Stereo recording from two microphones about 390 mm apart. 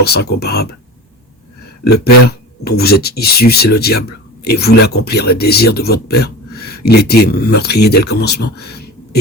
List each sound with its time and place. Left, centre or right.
0.0 s speech: left
2.2 s speech: left